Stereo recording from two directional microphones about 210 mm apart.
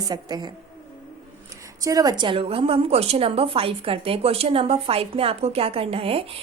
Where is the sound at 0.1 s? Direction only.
20° right (ahead or behind).